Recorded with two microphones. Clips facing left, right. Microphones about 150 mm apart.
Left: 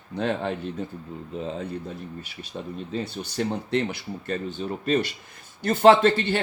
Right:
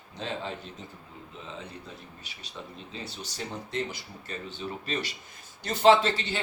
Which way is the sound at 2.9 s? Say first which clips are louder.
Left 10 dB; 60° left (ahead or behind).